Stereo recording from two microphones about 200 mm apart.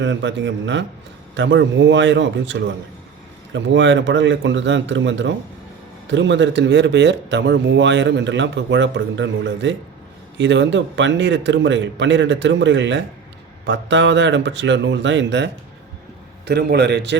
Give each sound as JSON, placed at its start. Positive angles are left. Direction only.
{"t": 0.0, "sound": "speech", "side_deg": -65}
{"t": 16.5, "sound": "speech", "side_deg": -55}